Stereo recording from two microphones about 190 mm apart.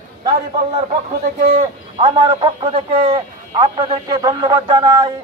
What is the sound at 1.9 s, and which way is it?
A man's voice, 25° right (ahead or behind).